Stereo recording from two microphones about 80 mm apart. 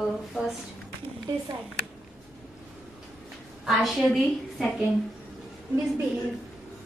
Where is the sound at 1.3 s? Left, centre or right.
Right.